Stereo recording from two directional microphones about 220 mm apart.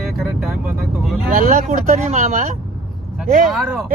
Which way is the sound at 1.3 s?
40° right (ahead or behind).